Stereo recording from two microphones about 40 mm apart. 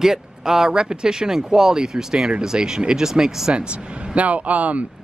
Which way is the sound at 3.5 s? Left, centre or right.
Right.